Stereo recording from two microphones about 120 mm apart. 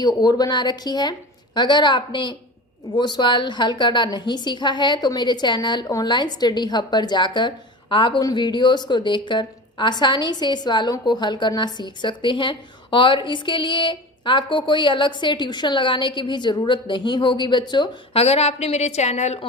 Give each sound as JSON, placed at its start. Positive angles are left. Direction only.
{"t": 0.0, "sound": "a woman's voice", "side_deg": 35}
{"t": 18.1, "sound": "a woman's voice", "side_deg": 55}